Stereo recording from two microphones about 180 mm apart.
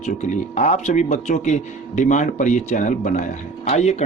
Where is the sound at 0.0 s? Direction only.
40° left (ahead or behind).